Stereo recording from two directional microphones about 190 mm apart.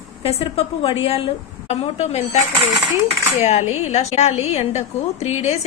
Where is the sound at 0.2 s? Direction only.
30° left (ahead or behind).